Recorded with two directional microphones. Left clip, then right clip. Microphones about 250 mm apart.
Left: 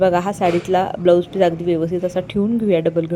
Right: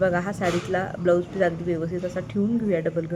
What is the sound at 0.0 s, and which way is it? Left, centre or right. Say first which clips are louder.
A woman's voice: left 7 dB; centre.